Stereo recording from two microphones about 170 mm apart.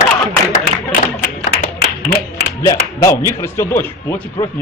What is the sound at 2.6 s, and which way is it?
Speech, 20° left (ahead or behind).